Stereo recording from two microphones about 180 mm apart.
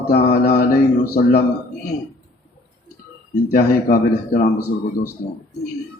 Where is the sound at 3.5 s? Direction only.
60° left (ahead or behind).